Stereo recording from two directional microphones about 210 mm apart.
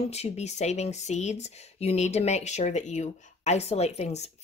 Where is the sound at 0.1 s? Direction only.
30° left (ahead or behind).